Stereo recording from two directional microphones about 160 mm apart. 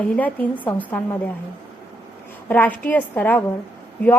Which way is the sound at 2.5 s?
10° left (ahead or behind).